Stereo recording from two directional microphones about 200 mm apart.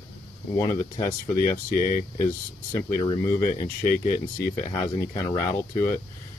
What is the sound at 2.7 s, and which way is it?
Speech, 20° left (ahead or behind).